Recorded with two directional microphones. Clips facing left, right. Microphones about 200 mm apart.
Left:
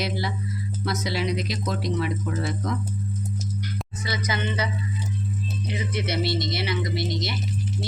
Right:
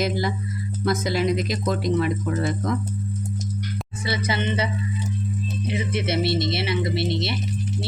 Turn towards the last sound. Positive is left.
turn(degrees=-25)  # may be behind; listen again after turning